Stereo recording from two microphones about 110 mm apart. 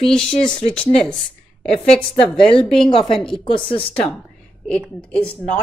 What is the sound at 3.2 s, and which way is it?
Speech, 5° left (ahead or behind).